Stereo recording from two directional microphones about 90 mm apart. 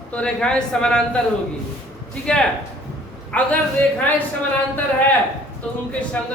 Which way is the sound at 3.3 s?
15° left (ahead or behind).